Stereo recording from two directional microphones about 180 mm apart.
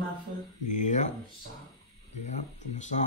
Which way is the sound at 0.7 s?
45° left (ahead or behind).